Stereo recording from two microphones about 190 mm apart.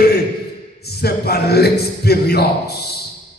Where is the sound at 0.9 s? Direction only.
55° left (ahead or behind).